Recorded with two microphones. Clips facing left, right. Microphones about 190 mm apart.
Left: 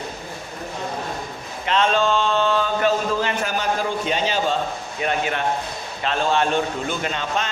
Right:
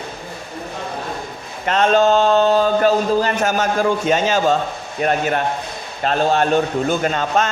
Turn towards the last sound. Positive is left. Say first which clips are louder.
# right 7 dB
turn(degrees=-45)  # may be behind; listen again after turning